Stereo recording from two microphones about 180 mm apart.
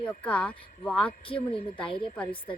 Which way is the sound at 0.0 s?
5° left (ahead or behind).